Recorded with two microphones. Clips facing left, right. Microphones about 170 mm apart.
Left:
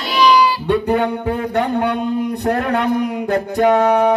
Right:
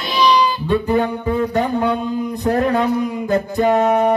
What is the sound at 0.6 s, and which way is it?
Music, 65° left (ahead or behind).